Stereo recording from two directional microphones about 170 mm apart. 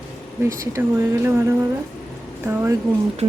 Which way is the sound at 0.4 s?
15° right (ahead or behind).